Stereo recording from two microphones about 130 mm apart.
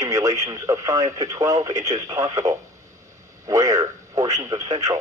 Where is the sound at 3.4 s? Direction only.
25° right (ahead or behind).